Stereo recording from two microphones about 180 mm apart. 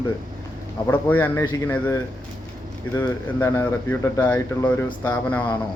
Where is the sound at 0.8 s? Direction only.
10° left (ahead or behind).